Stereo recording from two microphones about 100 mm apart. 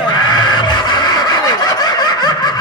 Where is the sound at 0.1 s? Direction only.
45° left (ahead or behind).